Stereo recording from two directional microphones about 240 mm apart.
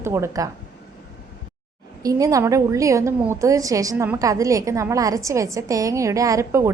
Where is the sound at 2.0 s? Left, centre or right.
Centre.